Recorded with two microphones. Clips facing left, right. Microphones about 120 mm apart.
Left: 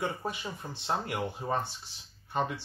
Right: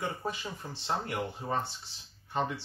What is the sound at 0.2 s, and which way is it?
Speech, 15° left (ahead or behind).